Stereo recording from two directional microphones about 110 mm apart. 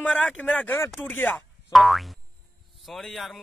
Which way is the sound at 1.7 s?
Centre (ahead or behind).